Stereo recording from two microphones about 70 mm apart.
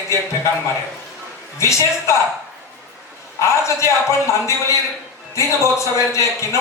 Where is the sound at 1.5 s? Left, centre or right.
Left.